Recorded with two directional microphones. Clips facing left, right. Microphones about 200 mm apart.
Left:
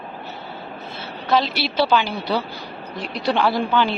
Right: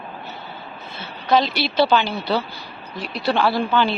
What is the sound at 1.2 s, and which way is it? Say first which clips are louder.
A woman's voice: right 2 dB; 5° left (ahead or behind).